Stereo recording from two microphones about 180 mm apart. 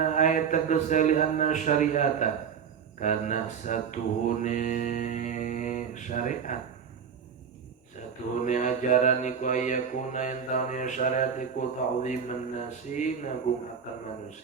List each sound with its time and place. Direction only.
0.0 s mantra: 40° left (ahead or behind)
8.4 s mantra: 40° left (ahead or behind)